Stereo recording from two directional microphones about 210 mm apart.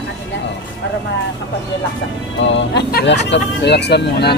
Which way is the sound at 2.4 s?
60° left (ahead or behind).